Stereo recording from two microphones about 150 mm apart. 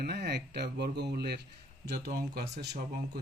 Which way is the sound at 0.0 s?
90° right.